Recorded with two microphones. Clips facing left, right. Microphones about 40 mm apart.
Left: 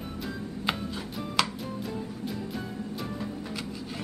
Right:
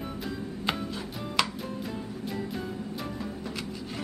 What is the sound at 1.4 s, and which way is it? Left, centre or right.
Music, centre.